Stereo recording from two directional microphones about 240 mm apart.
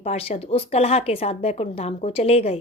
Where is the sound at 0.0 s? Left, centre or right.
Left.